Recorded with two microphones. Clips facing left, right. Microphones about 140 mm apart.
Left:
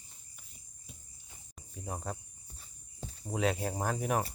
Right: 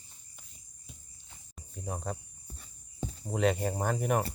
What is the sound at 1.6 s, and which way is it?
Cricket, centre (ahead or behind).